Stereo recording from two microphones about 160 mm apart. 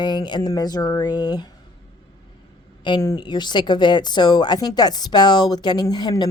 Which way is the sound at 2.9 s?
25° left (ahead or behind).